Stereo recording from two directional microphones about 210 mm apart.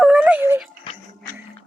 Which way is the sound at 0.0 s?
5° right (ahead or behind).